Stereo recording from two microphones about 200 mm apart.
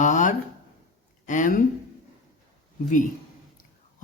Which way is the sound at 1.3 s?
40° left (ahead or behind).